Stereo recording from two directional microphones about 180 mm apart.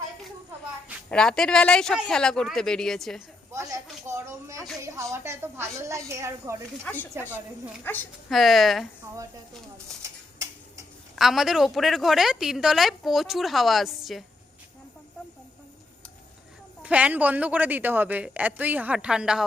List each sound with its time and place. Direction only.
1.1 s a woman's voice: 5° left (ahead or behind)
3.5 s speech: 15° right (ahead or behind)
6.8 s speech: 10° left (ahead or behind)
7.1 s a woman's voice: 10° right (ahead or behind)
9.7 s a sound: 15° right (ahead or behind)
11.1 s a woman's voice: centre (ahead or behind)
16.8 s speech: 10° right (ahead or behind)